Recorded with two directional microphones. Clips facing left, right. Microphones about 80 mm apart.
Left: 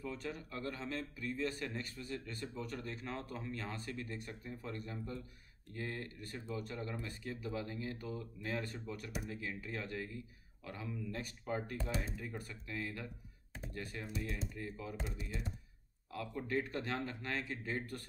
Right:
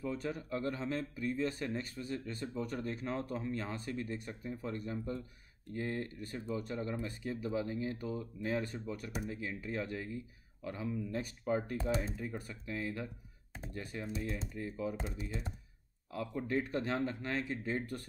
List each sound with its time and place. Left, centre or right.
0.0 s speech: right